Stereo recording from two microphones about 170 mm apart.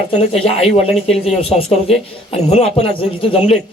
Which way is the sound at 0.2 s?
35° left (ahead or behind).